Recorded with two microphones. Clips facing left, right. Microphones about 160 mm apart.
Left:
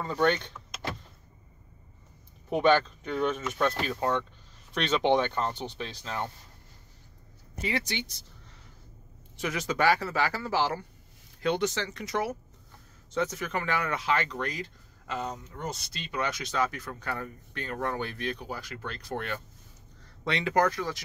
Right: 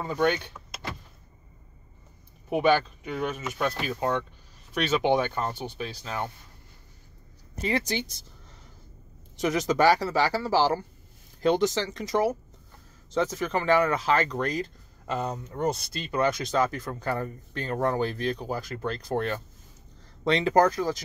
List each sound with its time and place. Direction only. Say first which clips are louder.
0.0 s speech: right 1 dB; 10° right (ahead or behind)
2.5 s speech: right 1 dB; 10° right (ahead or behind)
7.6 s speech: right 4 dB; 40° right (ahead or behind)
9.4 s speech: right 5 dB; 40° right (ahead or behind)
15.2 s speech: right 7 dB; 55° right (ahead or behind); by 20.9 s 35° right (ahead or behind)